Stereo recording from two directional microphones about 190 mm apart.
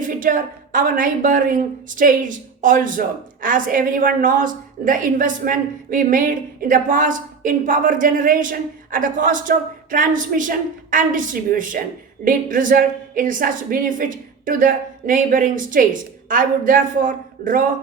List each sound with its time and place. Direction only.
0.0 s a woman's voice: 45° right (ahead or behind)